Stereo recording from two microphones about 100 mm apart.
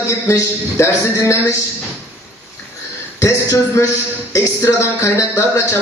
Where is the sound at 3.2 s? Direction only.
25° left (ahead or behind).